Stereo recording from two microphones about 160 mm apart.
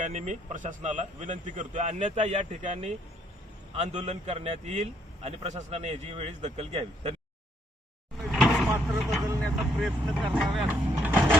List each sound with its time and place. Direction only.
0.0 s a man's voice: 50° right (ahead or behind)
8.2 s vehicle: centre (ahead or behind)
9.4 s speech: centre (ahead or behind)
11.0 s printer: 10° right (ahead or behind)